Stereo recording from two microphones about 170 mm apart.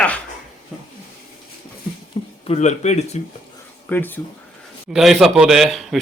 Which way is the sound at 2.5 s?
40° left (ahead or behind).